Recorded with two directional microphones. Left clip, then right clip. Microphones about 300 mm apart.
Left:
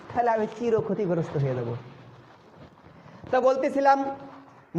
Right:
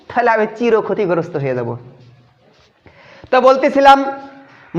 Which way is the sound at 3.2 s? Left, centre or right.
Right.